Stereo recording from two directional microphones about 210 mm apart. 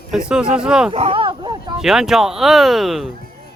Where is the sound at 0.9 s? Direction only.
25° right (ahead or behind).